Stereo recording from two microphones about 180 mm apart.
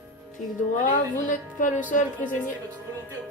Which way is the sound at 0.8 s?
45° left (ahead or behind).